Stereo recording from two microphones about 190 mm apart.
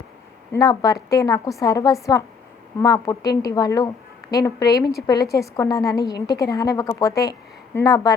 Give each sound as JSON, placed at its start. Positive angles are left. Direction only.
{"t": 0.5, "sound": "a woman's voice", "side_deg": 20}